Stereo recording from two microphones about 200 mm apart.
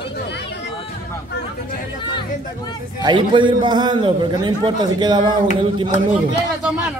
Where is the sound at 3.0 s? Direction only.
25° right (ahead or behind).